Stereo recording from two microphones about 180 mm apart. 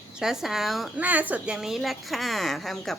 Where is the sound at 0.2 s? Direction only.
Centre (ahead or behind).